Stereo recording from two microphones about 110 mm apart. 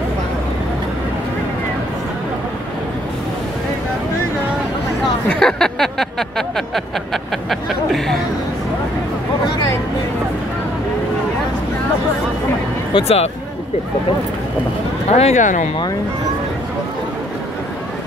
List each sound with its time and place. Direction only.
5.3 s a sound: 5° left (ahead or behind)
12.9 s speech: 70° left (ahead or behind)
15.0 s speech: 75° left (ahead or behind)